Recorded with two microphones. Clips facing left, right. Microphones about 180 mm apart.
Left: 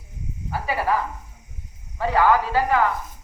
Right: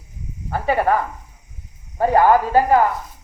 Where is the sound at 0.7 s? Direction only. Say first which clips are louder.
Right 5 dB; 55° right (ahead or behind).